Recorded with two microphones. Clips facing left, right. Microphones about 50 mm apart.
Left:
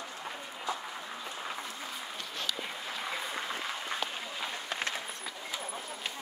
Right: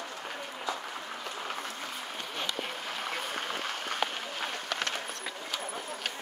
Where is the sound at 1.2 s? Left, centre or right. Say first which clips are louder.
Right 2 dB; right.